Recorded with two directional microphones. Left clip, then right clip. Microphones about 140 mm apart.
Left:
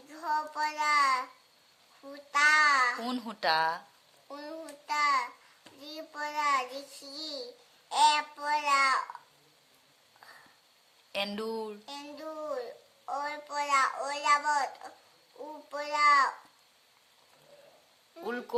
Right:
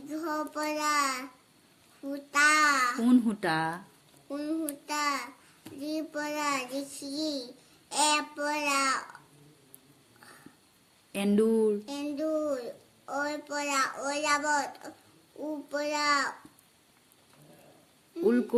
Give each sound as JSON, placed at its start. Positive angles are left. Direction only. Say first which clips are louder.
{"t": 0.1, "sound": "child singing", "louder": "left 1 dB", "side_deg": 25}
{"t": 2.3, "sound": "child singing", "louder": "even", "side_deg": 25}
{"t": 3.0, "sound": "speech", "louder": "right 6 dB", "side_deg": 10}
{"t": 4.3, "sound": "child singing", "louder": "right 8 dB", "side_deg": 30}
{"t": 11.1, "sound": "speech", "louder": "right 7 dB", "side_deg": 5}
{"t": 11.9, "sound": "a child's voice", "louder": "right 9 dB", "side_deg": 30}
{"t": 15.7, "sound": "a child's voice", "louder": "left 4 dB", "side_deg": 30}
{"t": 18.3, "sound": "speech", "louder": "right 10 dB", "side_deg": 5}